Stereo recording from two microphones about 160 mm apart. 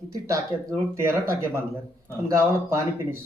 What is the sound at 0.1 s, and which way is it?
Speech, 20° right (ahead or behind).